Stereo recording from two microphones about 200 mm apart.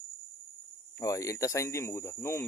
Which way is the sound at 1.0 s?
15° left (ahead or behind).